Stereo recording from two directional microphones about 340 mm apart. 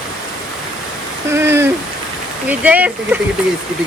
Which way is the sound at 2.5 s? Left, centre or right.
Centre.